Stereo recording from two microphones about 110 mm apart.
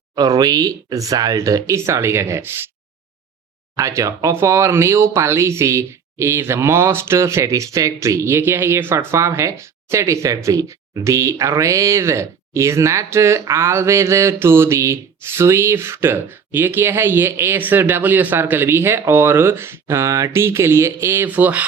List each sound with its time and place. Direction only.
0.2 s speech: 35° right (ahead or behind)
3.8 s speech: 30° right (ahead or behind)